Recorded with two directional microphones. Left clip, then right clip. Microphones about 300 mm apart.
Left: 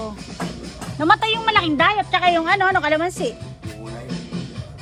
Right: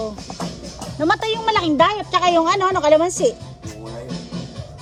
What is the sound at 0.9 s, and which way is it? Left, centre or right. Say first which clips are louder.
Speech: left 2 dB; centre.